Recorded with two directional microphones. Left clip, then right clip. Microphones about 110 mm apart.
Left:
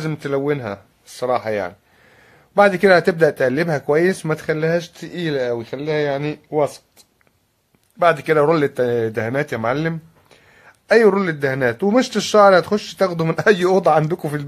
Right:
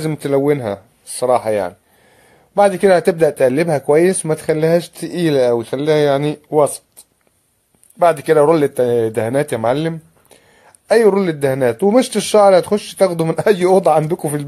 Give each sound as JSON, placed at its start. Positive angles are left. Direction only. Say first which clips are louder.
{"t": 0.2, "sound": "speech", "louder": "right 6 dB", "side_deg": -30}
{"t": 2.5, "sound": "speech", "louder": "right 1 dB", "side_deg": -10}
{"t": 4.6, "sound": "speech", "louder": "right 6 dB", "side_deg": -40}
{"t": 5.0, "sound": "speech", "louder": "right 7 dB", "side_deg": -55}
{"t": 8.0, "sound": "speech", "louder": "right 3 dB", "side_deg": -15}